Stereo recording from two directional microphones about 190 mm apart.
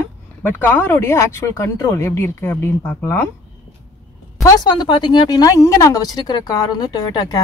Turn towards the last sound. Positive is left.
turn(degrees=20)  # may be behind; listen again after turning